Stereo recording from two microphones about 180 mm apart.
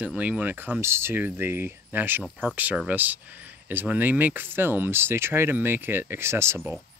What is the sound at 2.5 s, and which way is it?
Speech, 10° right (ahead or behind).